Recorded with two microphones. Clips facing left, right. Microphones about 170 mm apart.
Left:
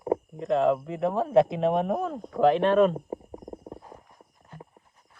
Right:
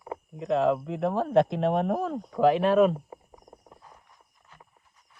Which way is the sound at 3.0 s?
30° left (ahead or behind).